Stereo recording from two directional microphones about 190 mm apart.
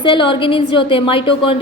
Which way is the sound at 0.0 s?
25° left (ahead or behind).